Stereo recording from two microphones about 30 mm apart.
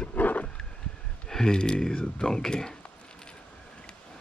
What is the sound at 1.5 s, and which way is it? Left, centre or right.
Speech, left.